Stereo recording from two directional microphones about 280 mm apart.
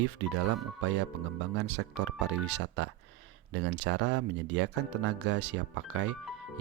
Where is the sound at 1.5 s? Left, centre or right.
Right.